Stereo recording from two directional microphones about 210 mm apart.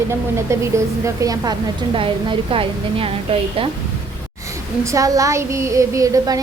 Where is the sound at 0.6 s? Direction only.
15° right (ahead or behind).